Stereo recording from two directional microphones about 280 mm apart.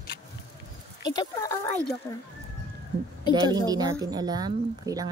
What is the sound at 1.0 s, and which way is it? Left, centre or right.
Speech, centre.